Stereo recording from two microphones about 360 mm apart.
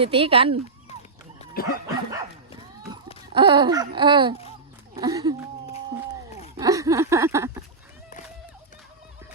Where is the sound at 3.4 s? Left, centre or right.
Centre.